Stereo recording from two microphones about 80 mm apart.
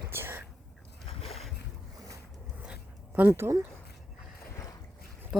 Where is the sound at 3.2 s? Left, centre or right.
Right.